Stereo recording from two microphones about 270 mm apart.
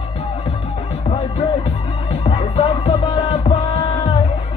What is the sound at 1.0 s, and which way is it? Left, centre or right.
Music, left.